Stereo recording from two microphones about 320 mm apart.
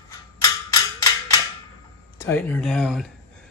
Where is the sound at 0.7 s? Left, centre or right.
Centre.